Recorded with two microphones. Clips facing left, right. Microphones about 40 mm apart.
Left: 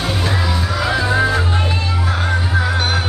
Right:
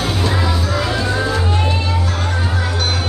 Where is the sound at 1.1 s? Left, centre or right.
Centre.